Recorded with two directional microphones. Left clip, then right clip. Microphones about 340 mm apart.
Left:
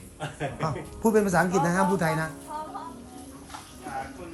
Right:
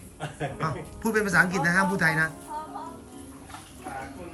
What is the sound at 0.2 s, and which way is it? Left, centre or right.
Speech, centre.